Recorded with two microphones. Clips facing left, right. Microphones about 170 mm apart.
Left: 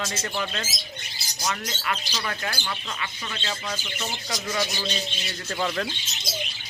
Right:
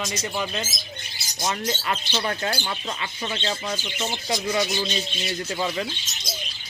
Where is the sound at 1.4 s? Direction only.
30° right (ahead or behind).